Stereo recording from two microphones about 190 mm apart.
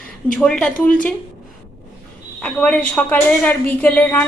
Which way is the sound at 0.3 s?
5° left (ahead or behind).